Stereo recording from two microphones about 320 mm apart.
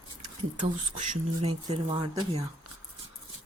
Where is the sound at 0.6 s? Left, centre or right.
Right.